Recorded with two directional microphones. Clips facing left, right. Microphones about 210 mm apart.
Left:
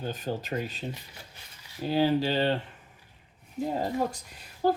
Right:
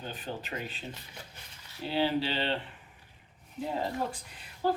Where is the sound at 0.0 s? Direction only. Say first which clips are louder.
Left 6 dB; 40° left (ahead or behind).